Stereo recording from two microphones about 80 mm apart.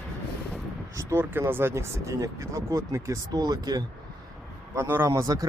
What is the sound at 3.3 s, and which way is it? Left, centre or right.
Speech, right.